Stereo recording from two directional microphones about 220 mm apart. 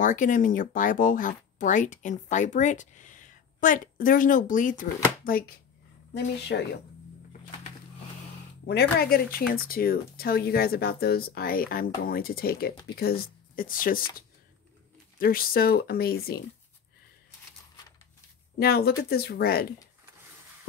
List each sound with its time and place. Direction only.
0.0 s speech: 35° left (ahead or behind)
8.6 s speech: 45° left (ahead or behind)
15.1 s speech: 40° left (ahead or behind)
18.6 s speech: 45° left (ahead or behind)